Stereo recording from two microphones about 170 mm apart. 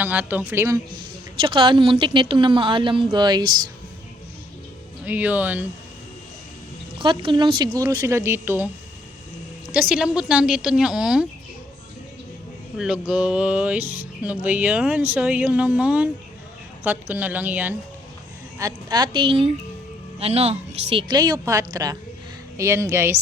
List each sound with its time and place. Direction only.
0.0 s music: 10° right (ahead or behind)
1.4 s speech: 30° right (ahead or behind)
5.0 s music: 10° right (ahead or behind)
7.0 s speech: 30° right (ahead or behind); by 8.7 s 10° right (ahead or behind)
9.9 s a woman's voice: 5° right (ahead or behind)
12.7 s music: 5° right (ahead or behind)
18.6 s speech: 25° right (ahead or behind)
21.1 s speech: 25° right (ahead or behind)
22.5 s music: 15° right (ahead or behind)